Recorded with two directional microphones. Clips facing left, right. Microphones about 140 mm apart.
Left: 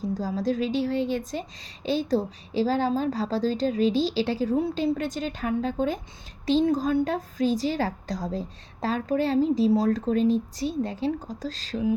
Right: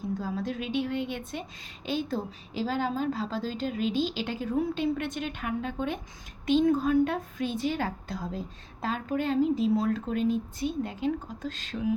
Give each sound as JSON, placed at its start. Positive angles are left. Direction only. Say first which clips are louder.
{"t": 0.2, "sound": "a woman's voice", "louder": "left 6 dB", "side_deg": 35}